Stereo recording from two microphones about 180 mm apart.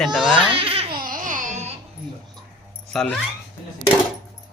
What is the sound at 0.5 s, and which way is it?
Baby cry, 30° right (ahead or behind).